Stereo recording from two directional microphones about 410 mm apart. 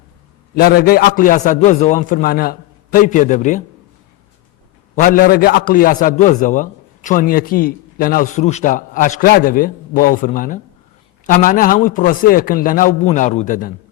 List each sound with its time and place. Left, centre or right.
0.5 s a man's voice: left
4.9 s a man's voice: centre